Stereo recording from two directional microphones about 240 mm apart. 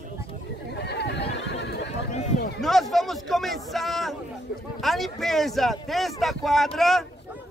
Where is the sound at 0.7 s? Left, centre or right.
Left.